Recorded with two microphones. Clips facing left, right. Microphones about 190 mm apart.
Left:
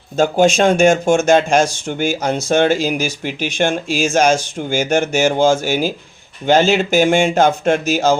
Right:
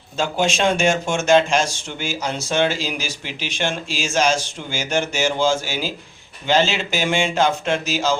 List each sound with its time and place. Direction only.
0.2 s speech: 45° left (ahead or behind)